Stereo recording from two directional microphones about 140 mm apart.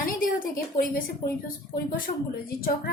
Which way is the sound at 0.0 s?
80° left.